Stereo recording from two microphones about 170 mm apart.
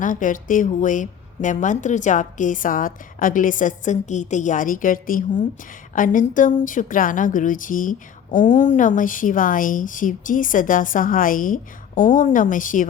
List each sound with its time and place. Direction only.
0.0 s a woman's voice: 50° left (ahead or behind)